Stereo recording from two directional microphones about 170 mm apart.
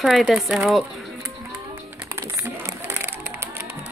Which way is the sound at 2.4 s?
15° right (ahead or behind).